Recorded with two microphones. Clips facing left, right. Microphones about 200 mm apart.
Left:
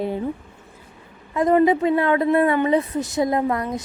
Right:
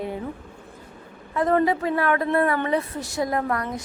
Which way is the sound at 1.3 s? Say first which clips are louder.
Left 4 dB; 15° left (ahead or behind).